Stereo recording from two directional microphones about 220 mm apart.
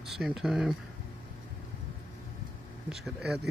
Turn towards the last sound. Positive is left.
turn(degrees=0)  # may be behind; listen again after turning